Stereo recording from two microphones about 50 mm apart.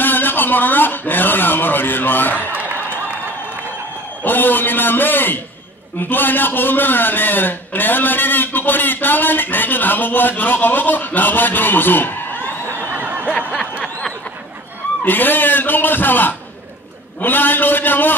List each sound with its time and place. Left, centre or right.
0.0 s a man's voice: left
2.5 s a sound: right
4.2 s a man's voice: left
12.9 s snicker: right
15.0 s a man's voice: left